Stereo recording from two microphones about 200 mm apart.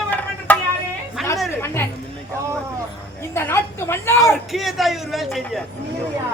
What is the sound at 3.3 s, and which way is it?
Speech, 10° left (ahead or behind).